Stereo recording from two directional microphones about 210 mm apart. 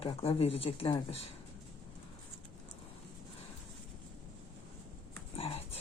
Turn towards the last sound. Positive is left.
turn(degrees=25)  # may be behind; listen again after turning